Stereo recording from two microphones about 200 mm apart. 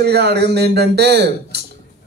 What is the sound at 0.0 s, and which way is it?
Speech, 55° right (ahead or behind).